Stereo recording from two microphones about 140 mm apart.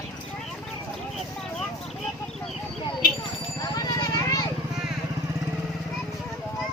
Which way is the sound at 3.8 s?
30° left (ahead or behind).